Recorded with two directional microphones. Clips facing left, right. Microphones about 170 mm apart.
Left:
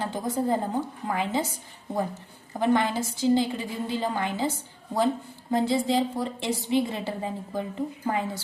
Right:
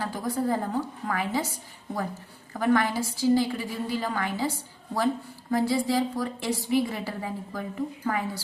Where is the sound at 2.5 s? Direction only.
20° left (ahead or behind).